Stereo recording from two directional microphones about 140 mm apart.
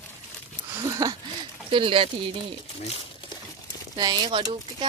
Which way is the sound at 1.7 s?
40° right (ahead or behind).